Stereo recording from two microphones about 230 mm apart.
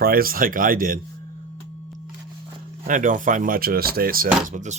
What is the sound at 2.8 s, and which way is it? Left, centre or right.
Speech, right.